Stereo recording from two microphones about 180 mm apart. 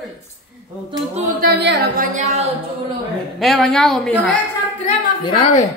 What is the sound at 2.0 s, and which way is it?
Speech, 45° right (ahead or behind).